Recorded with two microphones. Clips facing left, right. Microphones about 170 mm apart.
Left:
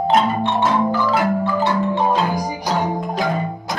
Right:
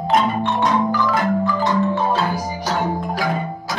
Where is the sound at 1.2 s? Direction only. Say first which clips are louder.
Left 1 dB; 10° left (ahead or behind).